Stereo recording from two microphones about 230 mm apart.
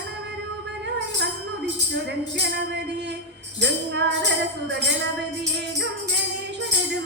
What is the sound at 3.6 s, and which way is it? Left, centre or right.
Music, right.